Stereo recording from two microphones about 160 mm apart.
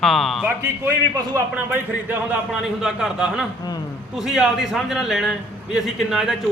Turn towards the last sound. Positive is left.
turn(degrees=0)  # may be behind; listen again after turning